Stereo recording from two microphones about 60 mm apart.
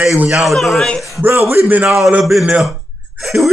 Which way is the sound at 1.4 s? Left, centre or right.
Right.